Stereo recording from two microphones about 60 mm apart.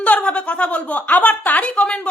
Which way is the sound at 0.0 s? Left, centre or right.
Left.